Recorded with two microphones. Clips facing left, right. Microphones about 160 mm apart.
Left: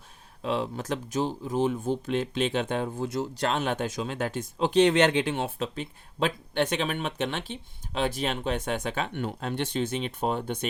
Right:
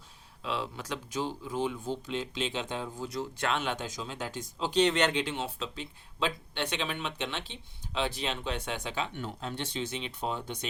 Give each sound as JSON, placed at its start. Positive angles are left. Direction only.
{"t": 0.4, "sound": "speech", "side_deg": 45}
{"t": 3.3, "sound": "speech", "side_deg": 40}